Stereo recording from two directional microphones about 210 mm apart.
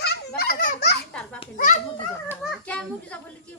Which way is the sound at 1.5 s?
40° left (ahead or behind).